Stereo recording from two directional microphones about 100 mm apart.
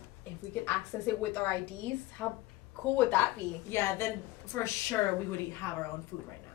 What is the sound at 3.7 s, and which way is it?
A woman's voice, 25° left (ahead or behind).